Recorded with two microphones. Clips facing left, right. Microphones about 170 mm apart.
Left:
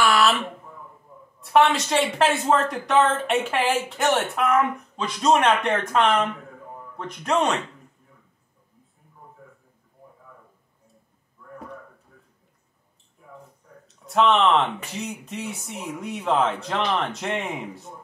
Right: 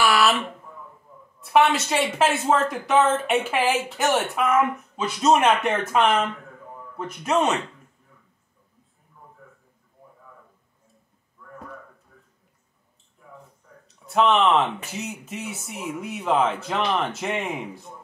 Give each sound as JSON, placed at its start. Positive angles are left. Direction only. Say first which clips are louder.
{"t": 0.0, "sound": "a sound", "louder": "even", "side_deg": -5}
{"t": 1.4, "sound": "speech", "louder": "even", "side_deg": 0}
{"t": 13.8, "sound": "speech", "louder": "even", "side_deg": 0}